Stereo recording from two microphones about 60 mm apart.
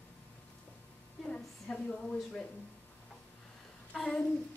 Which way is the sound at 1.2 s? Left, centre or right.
Left.